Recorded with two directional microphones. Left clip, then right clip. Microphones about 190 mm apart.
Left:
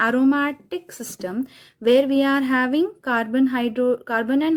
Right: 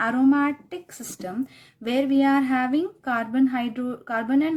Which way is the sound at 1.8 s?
35° left (ahead or behind).